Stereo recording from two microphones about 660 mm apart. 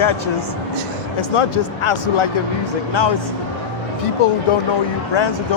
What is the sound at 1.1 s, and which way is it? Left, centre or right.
Speech, left.